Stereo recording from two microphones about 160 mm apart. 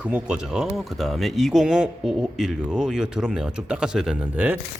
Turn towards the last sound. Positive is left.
turn(degrees=-10)  # may be behind; listen again after turning